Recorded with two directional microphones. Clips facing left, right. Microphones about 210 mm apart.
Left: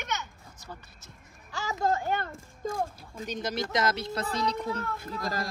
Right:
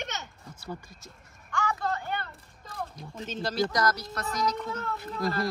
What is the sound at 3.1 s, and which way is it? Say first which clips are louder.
Speech: even; 15° left (ahead or behind).